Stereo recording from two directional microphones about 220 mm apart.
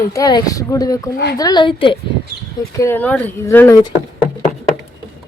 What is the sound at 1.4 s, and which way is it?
Speech, 20° left (ahead or behind).